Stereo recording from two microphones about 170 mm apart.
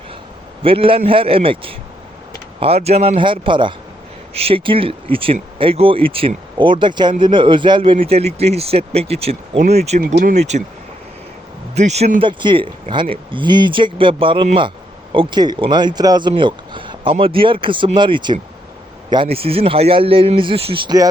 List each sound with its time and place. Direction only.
0.6 s speech: 30° right (ahead or behind)
11.7 s speech: 40° right (ahead or behind); by 21.1 s 25° right (ahead or behind)